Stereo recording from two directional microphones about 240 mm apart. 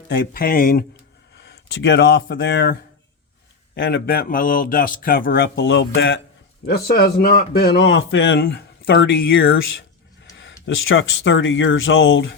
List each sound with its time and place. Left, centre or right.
0.1 s speech: left
1.4 s speech: left
3.8 s speech: left
6.7 s speech: left
10.3 s speech: left